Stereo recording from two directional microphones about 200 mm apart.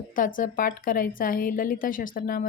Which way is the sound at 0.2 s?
40° left (ahead or behind).